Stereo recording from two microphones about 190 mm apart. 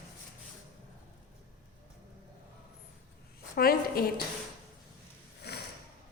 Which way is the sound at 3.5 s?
50° left (ahead or behind).